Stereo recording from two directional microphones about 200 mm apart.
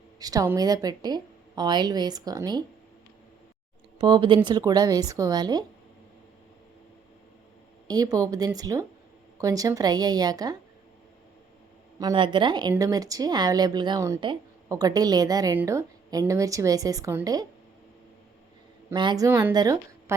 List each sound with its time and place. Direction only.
0.2 s a woman's voice: 20° right (ahead or behind)
3.9 s a woman's voice: 20° right (ahead or behind)
7.9 s a woman's voice: 20° right (ahead or behind)
11.9 s a woman's voice: 20° right (ahead or behind)
18.9 s a woman's voice: 20° right (ahead or behind)